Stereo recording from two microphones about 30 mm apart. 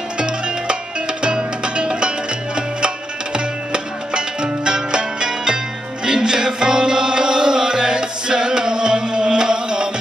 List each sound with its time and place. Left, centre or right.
0.2 s music: right